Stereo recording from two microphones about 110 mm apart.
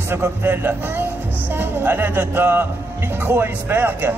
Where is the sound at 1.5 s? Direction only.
20° right (ahead or behind).